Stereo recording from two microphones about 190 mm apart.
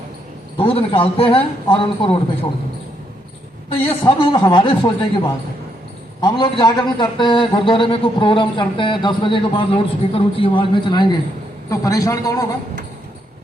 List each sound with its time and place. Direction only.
0.5 s a man's voice: 30° left (ahead or behind)
3.8 s a man's voice: 25° left (ahead or behind)
6.2 s a man's voice: 25° left (ahead or behind)